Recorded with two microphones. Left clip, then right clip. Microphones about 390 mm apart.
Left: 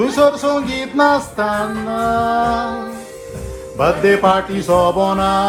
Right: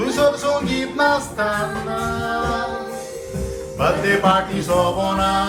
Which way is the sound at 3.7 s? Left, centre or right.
Centre.